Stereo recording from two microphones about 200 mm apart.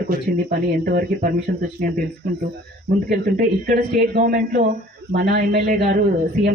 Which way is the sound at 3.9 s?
40° right (ahead or behind).